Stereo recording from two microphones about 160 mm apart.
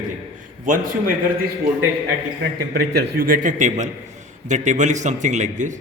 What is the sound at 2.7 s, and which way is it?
A man's voice, 75° right (ahead or behind).